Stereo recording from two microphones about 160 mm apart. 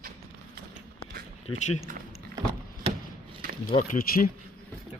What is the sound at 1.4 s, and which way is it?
Speech, 45° left (ahead or behind).